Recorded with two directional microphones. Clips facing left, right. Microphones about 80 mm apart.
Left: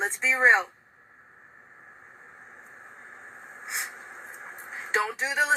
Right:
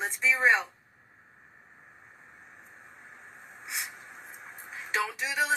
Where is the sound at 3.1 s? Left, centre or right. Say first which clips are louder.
Left 4 dB; left.